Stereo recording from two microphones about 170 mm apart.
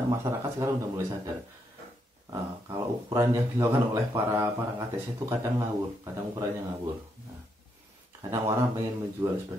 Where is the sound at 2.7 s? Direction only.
15° right (ahead or behind).